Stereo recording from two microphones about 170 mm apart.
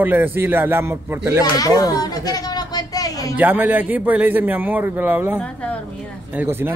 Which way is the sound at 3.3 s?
10° right (ahead or behind).